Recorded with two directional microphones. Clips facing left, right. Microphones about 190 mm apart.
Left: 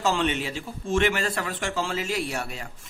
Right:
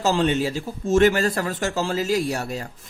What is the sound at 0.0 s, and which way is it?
Speech, 40° right (ahead or behind).